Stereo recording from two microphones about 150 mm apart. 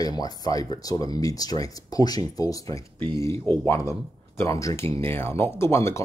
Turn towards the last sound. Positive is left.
turn(degrees=15)  # may be behind; listen again after turning